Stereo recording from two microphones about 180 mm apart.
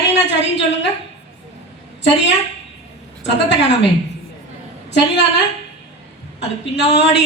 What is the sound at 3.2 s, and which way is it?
Speech, 75° left (ahead or behind).